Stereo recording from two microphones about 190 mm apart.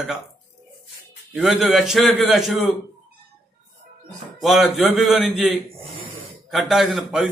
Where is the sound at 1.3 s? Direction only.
Centre (ahead or behind).